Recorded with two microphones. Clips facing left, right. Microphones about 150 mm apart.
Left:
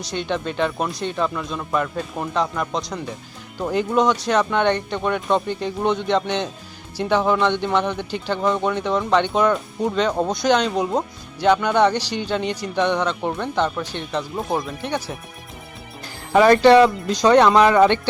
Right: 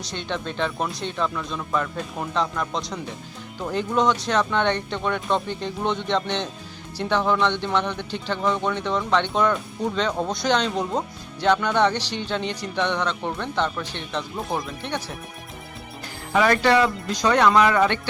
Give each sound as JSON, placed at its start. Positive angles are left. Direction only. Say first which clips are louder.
{"t": 0.1, "sound": "speech", "louder": "left 5 dB", "side_deg": 5}
{"t": 10.1, "sound": "speech", "louder": "left 4 dB", "side_deg": 20}
{"t": 10.4, "sound": "speech", "louder": "left 4 dB", "side_deg": 5}
{"t": 16.3, "sound": "speech", "louder": "left 7 dB", "side_deg": 35}